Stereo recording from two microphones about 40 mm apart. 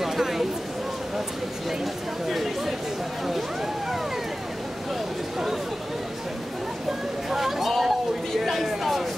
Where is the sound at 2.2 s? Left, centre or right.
Centre.